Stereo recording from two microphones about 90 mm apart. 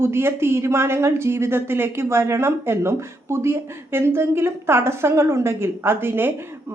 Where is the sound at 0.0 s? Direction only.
25° right (ahead or behind).